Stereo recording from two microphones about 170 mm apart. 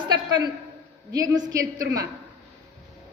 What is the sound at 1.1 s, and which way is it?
Speech, 20° right (ahead or behind).